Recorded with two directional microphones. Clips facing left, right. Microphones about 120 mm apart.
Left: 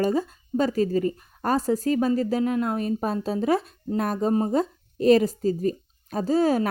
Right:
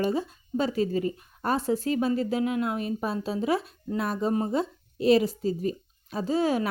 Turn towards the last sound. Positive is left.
turn(degrees=40)  # may be behind; listen again after turning